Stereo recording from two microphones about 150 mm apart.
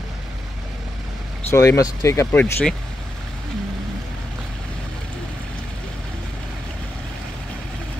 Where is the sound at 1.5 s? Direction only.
20° left (ahead or behind).